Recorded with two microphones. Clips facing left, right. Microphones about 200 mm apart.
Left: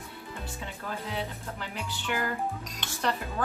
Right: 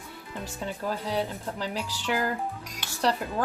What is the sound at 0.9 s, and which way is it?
Speech, 35° right (ahead or behind).